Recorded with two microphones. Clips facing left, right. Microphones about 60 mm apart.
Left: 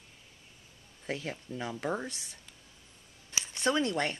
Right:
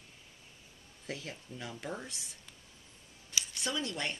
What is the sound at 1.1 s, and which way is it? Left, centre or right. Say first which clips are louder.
Speech: left 6 dB; left.